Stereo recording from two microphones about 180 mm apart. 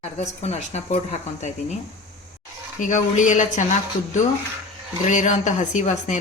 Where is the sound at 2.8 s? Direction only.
45° left (ahead or behind).